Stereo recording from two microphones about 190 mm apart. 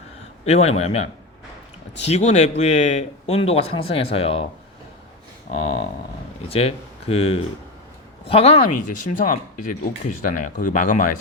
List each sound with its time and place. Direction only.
0.4 s speech: 30° left (ahead or behind)
5.5 s speech: 30° left (ahead or behind)